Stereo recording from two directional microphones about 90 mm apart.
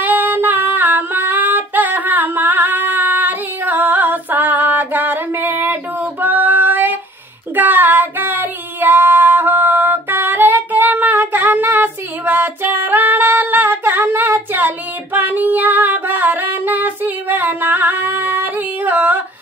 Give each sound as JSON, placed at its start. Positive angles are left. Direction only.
{"t": 0.0, "sound": "female singing", "side_deg": -20}
{"t": 7.5, "sound": "child singing", "side_deg": -20}
{"t": 15.1, "sound": "music", "side_deg": -20}